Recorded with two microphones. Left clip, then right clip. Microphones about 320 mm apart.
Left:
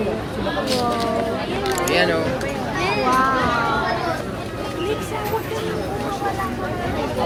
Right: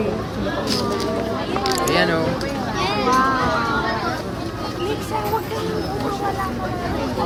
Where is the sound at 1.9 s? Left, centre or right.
Right.